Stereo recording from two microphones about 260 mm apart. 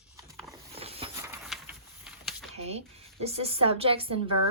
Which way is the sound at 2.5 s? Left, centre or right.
Right.